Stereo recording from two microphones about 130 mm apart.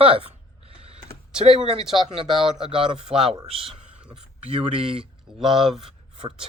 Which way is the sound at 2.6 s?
45° right (ahead or behind).